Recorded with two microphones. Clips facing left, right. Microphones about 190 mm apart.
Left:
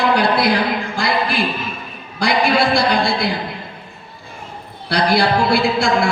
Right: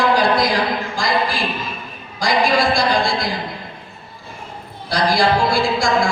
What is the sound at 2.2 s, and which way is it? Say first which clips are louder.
A man's voice: left 1 dB; 65° left (ahead or behind).